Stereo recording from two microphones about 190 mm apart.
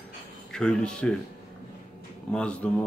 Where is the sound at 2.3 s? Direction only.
5° left (ahead or behind).